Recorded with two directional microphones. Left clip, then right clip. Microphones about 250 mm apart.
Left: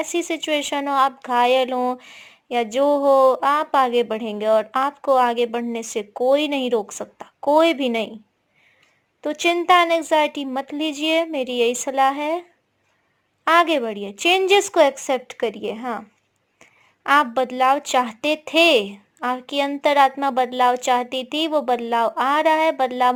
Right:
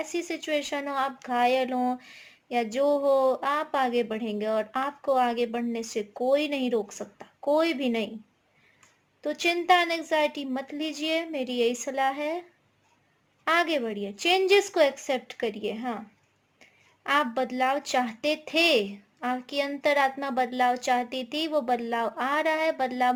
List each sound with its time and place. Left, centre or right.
0.0 s speech: left
9.2 s speech: left